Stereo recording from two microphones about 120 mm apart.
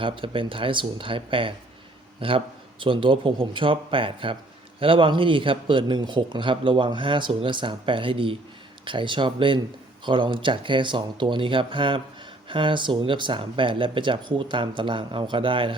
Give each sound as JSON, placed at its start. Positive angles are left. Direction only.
{"t": 0.0, "sound": "a man's voice", "side_deg": -45}